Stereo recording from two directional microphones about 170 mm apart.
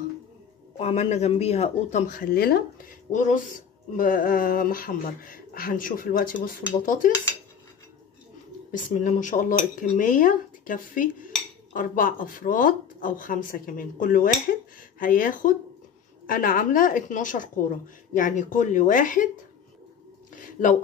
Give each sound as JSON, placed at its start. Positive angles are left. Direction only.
{"t": 0.7, "sound": "speech", "side_deg": 35}
{"t": 3.1, "sound": "speech", "side_deg": 50}
{"t": 8.7, "sound": "speech", "side_deg": 45}
{"t": 20.6, "sound": "speech", "side_deg": 50}